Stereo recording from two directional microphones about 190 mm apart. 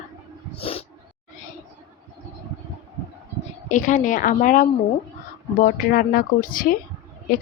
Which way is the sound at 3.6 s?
40° left (ahead or behind).